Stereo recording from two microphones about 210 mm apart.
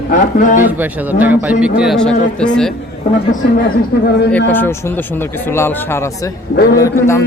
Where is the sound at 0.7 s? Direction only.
10° right (ahead or behind).